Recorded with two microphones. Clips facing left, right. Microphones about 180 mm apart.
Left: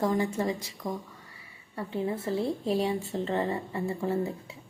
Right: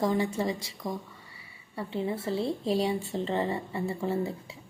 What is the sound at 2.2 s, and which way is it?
Speech, 30° right (ahead or behind).